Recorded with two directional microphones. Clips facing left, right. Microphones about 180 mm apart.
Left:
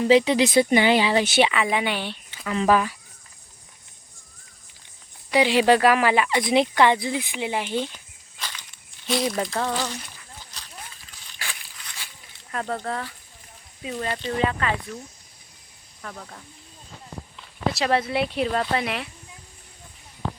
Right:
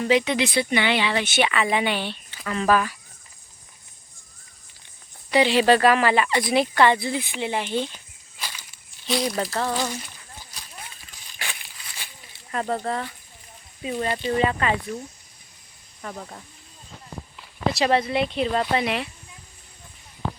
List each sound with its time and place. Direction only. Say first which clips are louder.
0.1 s speech: left 4 dB; 30° left (ahead or behind)
1.6 s speech: right 1 dB; 5° left (ahead or behind); by 3.0 s 20° left (ahead or behind)
5.3 s speech: even; 10° left (ahead or behind)
7.9 s snake: even; 10° right (ahead or behind)
12.5 s speech: right 2 dB; 10° right (ahead or behind)
17.3 s speech: right 2 dB; centre (ahead or behind)